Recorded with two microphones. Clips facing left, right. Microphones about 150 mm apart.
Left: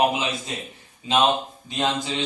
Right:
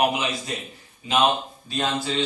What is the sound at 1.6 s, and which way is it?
Speech, 20° left (ahead or behind).